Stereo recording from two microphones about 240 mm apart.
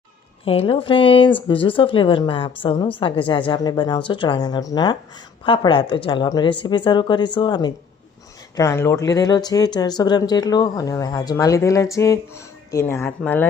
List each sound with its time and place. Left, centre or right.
0.4 s a woman's voice: left; by 13.5 s centre